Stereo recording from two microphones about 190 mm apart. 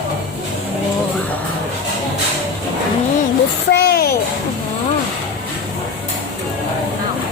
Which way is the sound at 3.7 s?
55° left (ahead or behind).